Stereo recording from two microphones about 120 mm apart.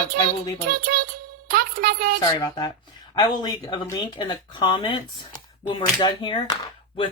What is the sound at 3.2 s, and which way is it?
Speech, 35° left (ahead or behind).